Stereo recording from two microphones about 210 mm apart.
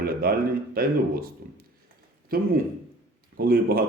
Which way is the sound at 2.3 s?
45° right (ahead or behind).